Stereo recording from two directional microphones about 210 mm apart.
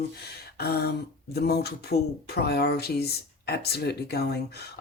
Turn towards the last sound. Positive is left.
turn(degrees=50)  # may be behind; listen again after turning